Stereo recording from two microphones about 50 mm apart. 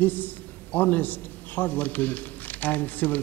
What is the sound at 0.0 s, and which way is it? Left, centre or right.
A man's voice, left.